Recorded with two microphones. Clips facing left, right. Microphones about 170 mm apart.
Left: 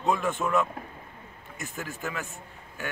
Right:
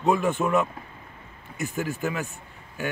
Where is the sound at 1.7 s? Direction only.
10° right (ahead or behind).